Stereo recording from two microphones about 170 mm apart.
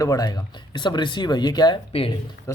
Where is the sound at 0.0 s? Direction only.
20° left (ahead or behind).